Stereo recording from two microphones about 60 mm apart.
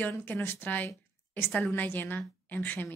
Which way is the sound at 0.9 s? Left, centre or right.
Left.